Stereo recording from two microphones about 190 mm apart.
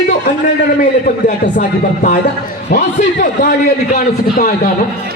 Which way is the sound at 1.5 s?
45° left (ahead or behind).